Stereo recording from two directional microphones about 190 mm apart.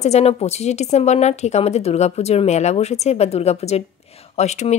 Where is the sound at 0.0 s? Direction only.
35° left (ahead or behind).